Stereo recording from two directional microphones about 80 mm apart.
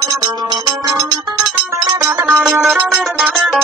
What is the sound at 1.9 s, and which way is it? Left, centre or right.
Music, right.